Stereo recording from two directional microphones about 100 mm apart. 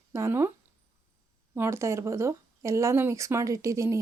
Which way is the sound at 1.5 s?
25° right (ahead or behind).